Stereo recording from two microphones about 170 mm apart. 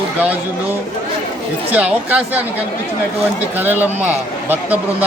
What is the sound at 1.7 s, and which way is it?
Speech, 10° right (ahead or behind).